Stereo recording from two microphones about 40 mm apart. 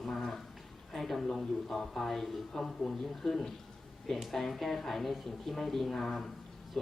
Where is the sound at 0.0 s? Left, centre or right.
Centre.